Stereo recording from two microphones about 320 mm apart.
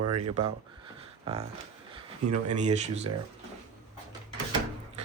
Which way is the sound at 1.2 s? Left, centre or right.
Centre.